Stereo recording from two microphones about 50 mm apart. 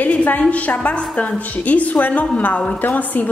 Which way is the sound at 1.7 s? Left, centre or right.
Left.